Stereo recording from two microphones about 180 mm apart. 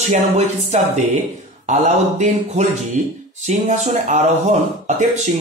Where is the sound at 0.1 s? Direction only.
40° right (ahead or behind).